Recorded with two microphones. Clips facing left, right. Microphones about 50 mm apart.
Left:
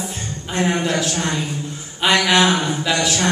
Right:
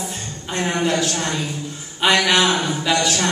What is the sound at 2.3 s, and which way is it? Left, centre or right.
Speech, left.